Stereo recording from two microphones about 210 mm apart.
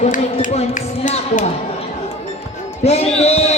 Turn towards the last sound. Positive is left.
turn(degrees=30)  # may be behind; listen again after turning